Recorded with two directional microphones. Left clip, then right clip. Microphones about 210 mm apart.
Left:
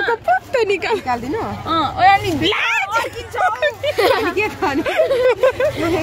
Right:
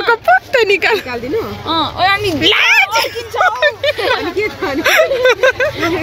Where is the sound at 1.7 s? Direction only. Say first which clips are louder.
Left 1 dB; 40° right (ahead or behind).